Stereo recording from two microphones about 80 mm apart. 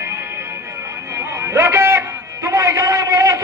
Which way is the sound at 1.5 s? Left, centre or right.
Right.